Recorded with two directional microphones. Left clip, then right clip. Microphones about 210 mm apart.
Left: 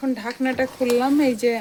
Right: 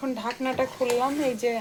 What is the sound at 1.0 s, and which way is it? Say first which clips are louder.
Speech: left 6 dB; 30° left (ahead or behind).